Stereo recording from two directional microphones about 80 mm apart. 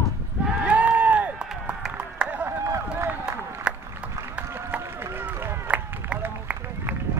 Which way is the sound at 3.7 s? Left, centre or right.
Centre.